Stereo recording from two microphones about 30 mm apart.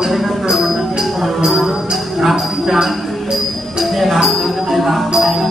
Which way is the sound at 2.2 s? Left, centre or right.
Centre.